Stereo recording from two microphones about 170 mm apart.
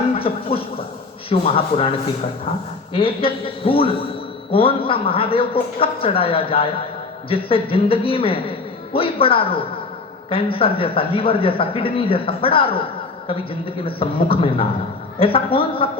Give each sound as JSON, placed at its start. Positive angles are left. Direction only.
{"t": 0.2, "sound": "speech", "side_deg": 35}
{"t": 13.8, "sound": "speech", "side_deg": 30}